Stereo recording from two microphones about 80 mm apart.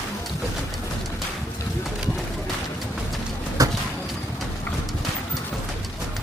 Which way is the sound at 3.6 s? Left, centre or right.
Right.